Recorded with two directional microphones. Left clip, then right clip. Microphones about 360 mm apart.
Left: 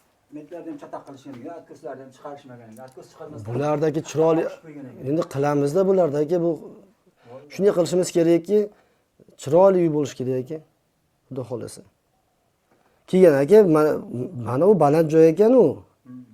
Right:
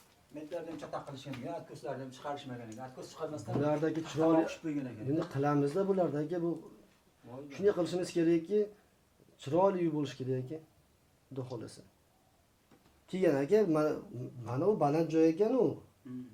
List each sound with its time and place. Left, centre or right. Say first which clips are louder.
3.6 s speech: left 10 dB; left
13.1 s speech: left 15 dB; left